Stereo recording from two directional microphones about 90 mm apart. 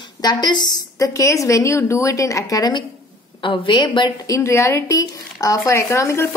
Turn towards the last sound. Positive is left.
turn(degrees=30)  # may be behind; listen again after turning